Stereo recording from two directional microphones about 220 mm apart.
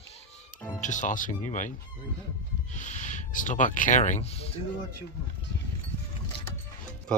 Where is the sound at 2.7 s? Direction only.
35° left (ahead or behind).